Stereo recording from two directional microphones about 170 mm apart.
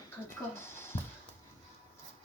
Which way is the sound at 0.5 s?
15° left (ahead or behind).